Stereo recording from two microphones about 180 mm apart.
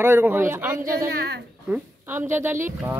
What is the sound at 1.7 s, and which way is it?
Speech, 10° right (ahead or behind).